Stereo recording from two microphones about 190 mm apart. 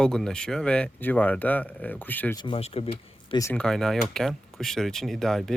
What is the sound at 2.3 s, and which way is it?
Speech, 25° left (ahead or behind).